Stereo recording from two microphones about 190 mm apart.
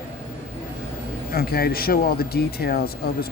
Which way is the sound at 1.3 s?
55° left (ahead or behind).